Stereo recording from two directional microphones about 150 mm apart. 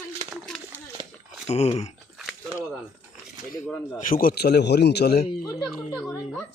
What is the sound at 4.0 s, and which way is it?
Speech, 70° left (ahead or behind).